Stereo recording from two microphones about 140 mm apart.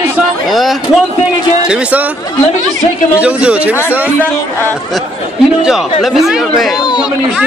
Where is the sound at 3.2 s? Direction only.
10° right (ahead or behind).